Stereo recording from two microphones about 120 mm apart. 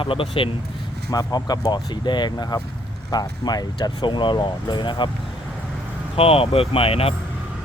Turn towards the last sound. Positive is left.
turn(degrees=55)  # may be behind; listen again after turning